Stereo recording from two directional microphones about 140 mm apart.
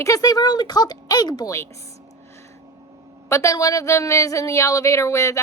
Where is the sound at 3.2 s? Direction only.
20° left (ahead or behind).